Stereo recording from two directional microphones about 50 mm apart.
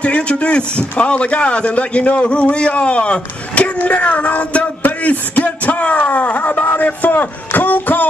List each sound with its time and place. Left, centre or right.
0.0 s speech: left